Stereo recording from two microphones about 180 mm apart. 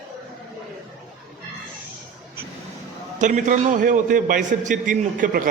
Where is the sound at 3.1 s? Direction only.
45° right (ahead or behind).